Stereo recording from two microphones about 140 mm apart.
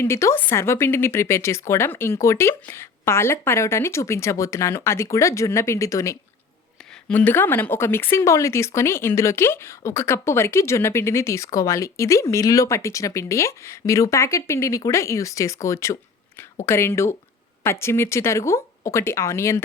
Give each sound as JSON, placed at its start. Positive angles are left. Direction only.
{"t": 0.0, "sound": "speech", "side_deg": 20}
{"t": 7.1, "sound": "speech", "side_deg": 10}